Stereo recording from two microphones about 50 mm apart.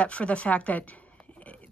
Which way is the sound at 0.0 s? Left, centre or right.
Left.